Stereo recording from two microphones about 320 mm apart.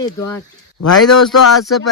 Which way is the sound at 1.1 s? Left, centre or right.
Left.